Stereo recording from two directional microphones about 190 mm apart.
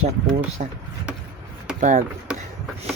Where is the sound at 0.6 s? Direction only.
40° right (ahead or behind).